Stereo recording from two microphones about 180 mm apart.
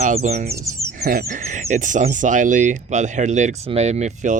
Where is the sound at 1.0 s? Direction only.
55° right (ahead or behind).